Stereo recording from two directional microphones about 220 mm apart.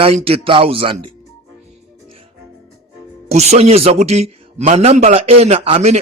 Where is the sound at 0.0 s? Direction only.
25° right (ahead or behind).